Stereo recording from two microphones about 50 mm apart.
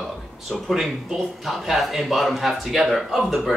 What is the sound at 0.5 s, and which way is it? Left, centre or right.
Speech, centre.